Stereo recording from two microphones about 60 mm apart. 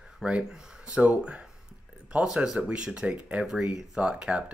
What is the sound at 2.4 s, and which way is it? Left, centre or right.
Speech, centre.